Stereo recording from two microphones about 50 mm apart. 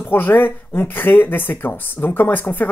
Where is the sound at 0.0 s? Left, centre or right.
Left.